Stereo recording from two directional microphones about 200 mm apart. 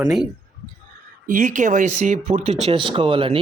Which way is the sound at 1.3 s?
40° right (ahead or behind).